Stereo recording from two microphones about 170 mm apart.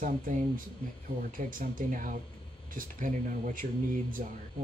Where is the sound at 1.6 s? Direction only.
50° right (ahead or behind).